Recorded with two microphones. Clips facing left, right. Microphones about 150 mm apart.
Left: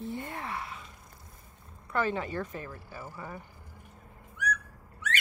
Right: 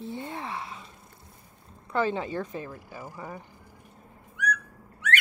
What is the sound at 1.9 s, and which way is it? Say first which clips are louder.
Speech: right 3 dB; 25° right (ahead or behind).